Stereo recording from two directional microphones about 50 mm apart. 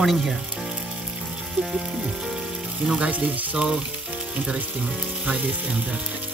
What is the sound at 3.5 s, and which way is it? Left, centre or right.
Frying, right.